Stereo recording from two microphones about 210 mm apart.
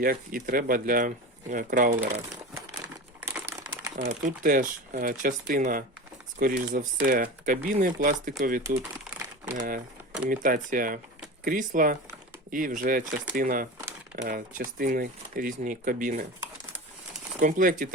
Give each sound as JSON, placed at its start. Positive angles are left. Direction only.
{"t": 0.0, "sound": "speech", "side_deg": -40}
{"t": 3.2, "sound": "crumpling", "side_deg": -10}
{"t": 3.9, "sound": "speech", "side_deg": -40}
{"t": 17.4, "sound": "speech", "side_deg": -40}